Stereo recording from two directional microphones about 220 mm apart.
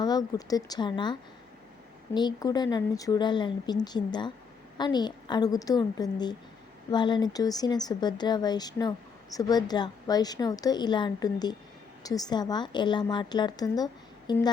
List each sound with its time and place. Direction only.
0.0 s a woman's voice: 20° left (ahead or behind)